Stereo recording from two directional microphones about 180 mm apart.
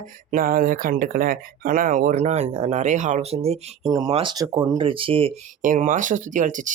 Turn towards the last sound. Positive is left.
turn(degrees=-45)  # may be behind; listen again after turning